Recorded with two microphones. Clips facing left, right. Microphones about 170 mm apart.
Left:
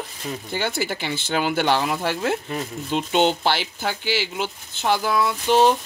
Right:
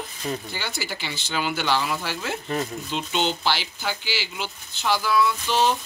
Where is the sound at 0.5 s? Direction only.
55° left (ahead or behind).